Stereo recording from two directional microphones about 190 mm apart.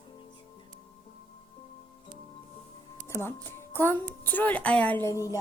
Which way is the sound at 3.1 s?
10° left (ahead or behind).